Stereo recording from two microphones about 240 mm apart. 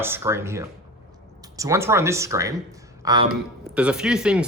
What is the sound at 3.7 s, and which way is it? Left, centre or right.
Speech, centre.